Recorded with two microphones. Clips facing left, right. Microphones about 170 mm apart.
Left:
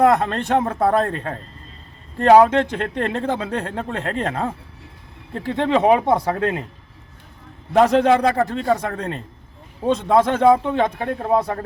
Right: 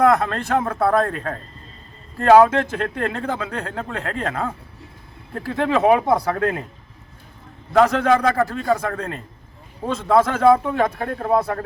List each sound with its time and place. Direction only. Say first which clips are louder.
0.0 s speech: left 1 dB; 25° left (ahead or behind)
7.7 s speech: left 2 dB; 25° left (ahead or behind)